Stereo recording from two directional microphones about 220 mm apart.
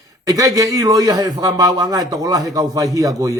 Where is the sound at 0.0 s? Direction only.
15° right (ahead or behind).